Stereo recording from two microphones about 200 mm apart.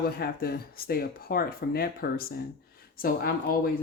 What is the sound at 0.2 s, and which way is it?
Speech, 50° left (ahead or behind).